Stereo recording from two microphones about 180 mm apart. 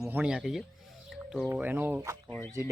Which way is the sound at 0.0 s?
10° right (ahead or behind).